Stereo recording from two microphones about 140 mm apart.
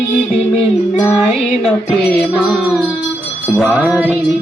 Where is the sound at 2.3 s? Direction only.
5° right (ahead or behind).